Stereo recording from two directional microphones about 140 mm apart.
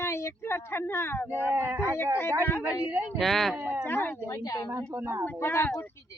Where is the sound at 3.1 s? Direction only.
Centre (ahead or behind).